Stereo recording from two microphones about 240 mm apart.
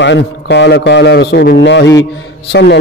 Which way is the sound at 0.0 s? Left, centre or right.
Left.